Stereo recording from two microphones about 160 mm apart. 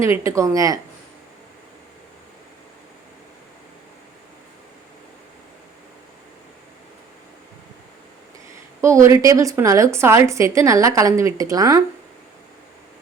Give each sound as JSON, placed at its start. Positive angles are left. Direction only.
{"t": 0.0, "sound": "a woman's voice", "side_deg": -20}
{"t": 8.8, "sound": "a woman's voice", "side_deg": -20}